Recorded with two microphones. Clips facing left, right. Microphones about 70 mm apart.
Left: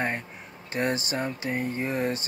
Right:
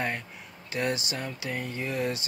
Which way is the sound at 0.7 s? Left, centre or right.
Left.